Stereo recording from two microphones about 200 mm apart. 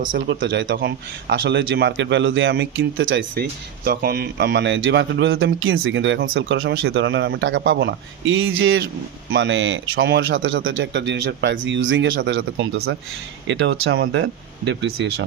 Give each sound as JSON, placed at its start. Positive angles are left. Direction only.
{"t": 0.0, "sound": "a man's voice", "side_deg": -70}
{"t": 3.8, "sound": "a man's voice", "side_deg": -50}
{"t": 9.3, "sound": "a man's voice", "side_deg": -65}